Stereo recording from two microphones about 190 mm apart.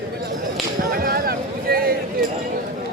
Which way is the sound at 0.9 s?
50° right (ahead or behind).